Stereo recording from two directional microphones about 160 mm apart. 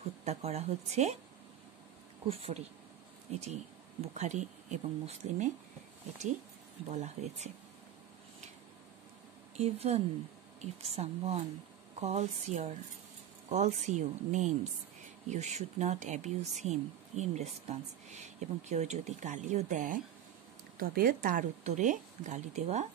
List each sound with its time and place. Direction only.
0.2 s speech: 40° right (ahead or behind)
2.2 s speech: 35° right (ahead or behind)
6.9 s speech: 45° right (ahead or behind)
9.6 s speech: 40° right (ahead or behind)
20.8 s speech: 65° right (ahead or behind); by 22.8 s 45° right (ahead or behind)